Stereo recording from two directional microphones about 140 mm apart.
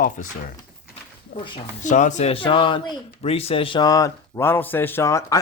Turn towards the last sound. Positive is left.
turn(degrees=20)  # may be behind; listen again after turning